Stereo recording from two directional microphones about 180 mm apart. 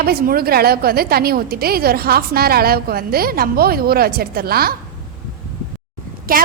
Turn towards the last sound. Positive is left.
turn(degrees=-55)  # may be behind; listen again after turning